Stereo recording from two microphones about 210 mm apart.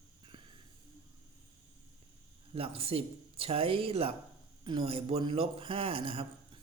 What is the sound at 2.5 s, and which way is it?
A man's voice, 30° right (ahead or behind).